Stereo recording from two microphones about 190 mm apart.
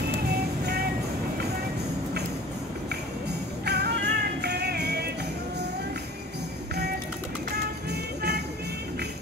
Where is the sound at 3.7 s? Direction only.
60° right (ahead or behind).